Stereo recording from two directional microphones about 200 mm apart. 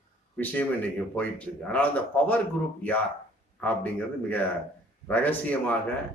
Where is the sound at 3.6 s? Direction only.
10° left (ahead or behind).